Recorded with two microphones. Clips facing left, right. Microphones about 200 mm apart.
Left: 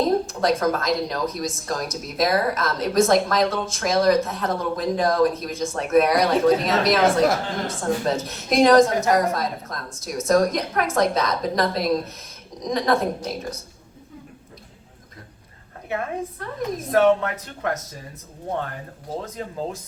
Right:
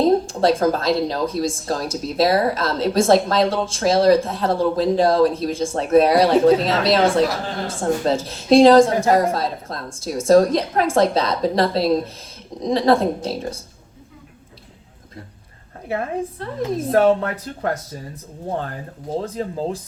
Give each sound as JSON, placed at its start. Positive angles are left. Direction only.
{"t": 0.3, "sound": "a woman's voice", "side_deg": -30}
{"t": 15.9, "sound": "a woman's voice", "side_deg": -30}
{"t": 19.2, "sound": "a woman's voice", "side_deg": -35}